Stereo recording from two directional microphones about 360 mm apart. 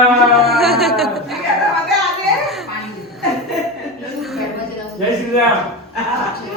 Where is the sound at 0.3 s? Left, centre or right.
Centre.